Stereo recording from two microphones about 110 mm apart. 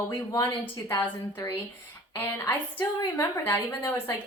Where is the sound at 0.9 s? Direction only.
30° left (ahead or behind).